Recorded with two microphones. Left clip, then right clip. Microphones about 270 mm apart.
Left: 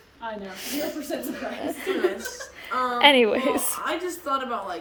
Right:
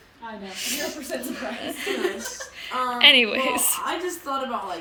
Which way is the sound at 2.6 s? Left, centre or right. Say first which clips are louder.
Even; centre.